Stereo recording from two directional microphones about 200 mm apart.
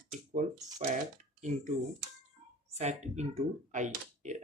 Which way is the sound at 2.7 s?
35° right (ahead or behind).